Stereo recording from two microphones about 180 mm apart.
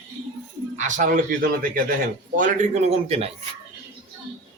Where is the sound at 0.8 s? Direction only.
45° right (ahead or behind).